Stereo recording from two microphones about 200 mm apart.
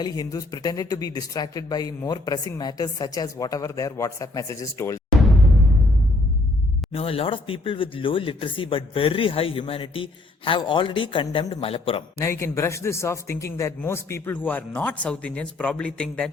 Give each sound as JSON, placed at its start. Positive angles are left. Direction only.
{"t": 0.0, "sound": "a man's voice", "side_deg": 20}
{"t": 6.9, "sound": "speech", "side_deg": 30}
{"t": 12.2, "sound": "a man's voice", "side_deg": 15}